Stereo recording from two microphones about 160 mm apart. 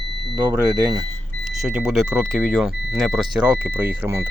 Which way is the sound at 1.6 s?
5° right (ahead or behind).